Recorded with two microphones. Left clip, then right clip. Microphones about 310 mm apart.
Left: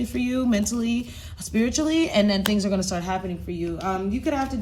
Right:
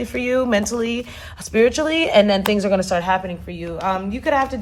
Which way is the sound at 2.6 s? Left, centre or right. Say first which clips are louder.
Right 8 dB; centre.